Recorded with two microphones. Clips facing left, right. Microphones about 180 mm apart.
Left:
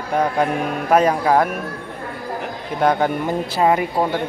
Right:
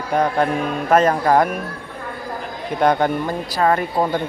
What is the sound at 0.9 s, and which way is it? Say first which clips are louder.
Speech: even; 10° left (ahead or behind).